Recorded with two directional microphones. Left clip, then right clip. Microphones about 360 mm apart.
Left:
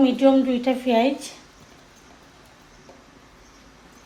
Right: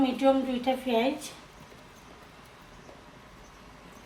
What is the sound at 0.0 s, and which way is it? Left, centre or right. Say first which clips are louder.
Speech: left 7 dB; left.